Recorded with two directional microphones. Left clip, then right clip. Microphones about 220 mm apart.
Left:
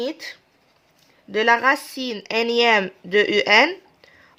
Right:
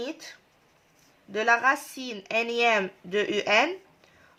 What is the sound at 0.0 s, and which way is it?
A woman's voice, 40° left (ahead or behind).